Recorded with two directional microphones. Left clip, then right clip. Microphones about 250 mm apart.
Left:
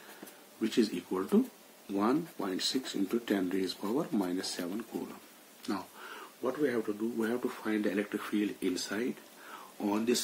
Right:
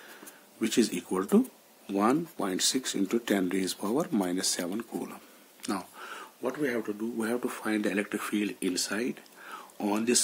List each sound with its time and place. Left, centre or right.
0.6 s speech: right